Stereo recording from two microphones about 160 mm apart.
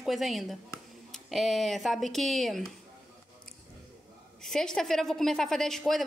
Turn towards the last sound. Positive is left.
turn(degrees=0)  # may be behind; listen again after turning